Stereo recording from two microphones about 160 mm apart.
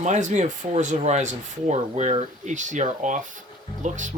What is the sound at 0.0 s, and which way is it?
Speech, 50° right (ahead or behind).